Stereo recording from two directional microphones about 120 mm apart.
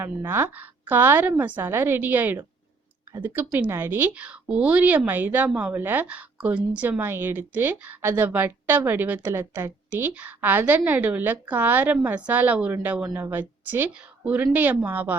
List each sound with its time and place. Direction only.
0.0 s a woman's voice: 20° right (ahead or behind)